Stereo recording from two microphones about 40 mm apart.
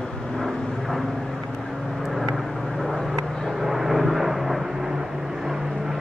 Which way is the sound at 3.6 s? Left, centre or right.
Centre.